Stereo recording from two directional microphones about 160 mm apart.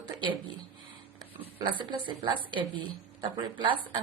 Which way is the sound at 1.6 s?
30° right (ahead or behind).